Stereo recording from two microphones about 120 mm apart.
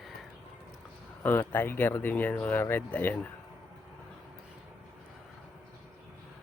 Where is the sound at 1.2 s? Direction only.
15° left (ahead or behind).